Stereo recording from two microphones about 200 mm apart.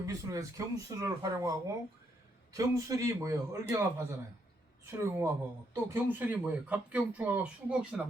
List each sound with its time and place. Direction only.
0.0 s speech: 15° right (ahead or behind)